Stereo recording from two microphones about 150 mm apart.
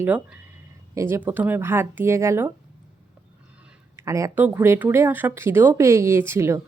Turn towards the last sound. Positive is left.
turn(degrees=-15)  # may be behind; listen again after turning